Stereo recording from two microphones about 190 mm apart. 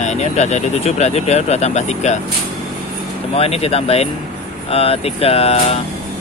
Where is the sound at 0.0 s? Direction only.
35° left (ahead or behind).